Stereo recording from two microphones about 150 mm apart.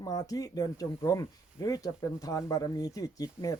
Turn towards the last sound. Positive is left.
turn(degrees=25)  # may be behind; listen again after turning